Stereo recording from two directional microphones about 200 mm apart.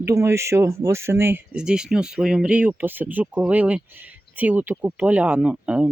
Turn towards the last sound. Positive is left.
turn(degrees=-5)  # may be behind; listen again after turning